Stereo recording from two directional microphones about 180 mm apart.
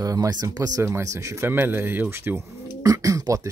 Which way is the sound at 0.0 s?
20° right (ahead or behind).